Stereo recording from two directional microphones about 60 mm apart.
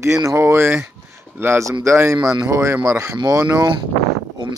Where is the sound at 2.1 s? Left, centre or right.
Right.